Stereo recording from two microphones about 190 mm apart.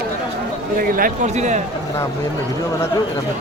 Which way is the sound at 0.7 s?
45° right (ahead or behind).